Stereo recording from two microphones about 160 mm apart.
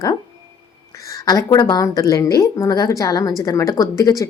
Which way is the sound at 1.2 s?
25° left (ahead or behind).